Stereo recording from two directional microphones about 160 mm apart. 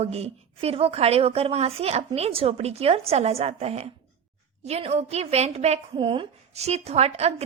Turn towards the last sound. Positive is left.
turn(degrees=-40)  # may be behind; listen again after turning